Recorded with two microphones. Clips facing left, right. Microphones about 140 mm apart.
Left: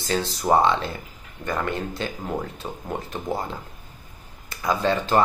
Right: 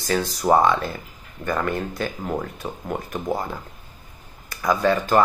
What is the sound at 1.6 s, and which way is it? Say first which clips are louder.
Speech: right 2 dB; 25° left (ahead or behind).